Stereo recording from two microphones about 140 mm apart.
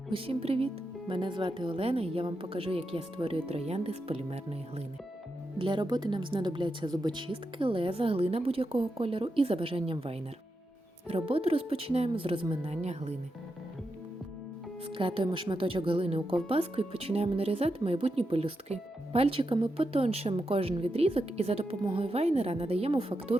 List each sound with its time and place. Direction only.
0.1 s speech: 40° right (ahead or behind)
5.5 s speech: 35° right (ahead or behind); by 13.1 s 50° right (ahead or behind)
14.8 s speech: 40° right (ahead or behind)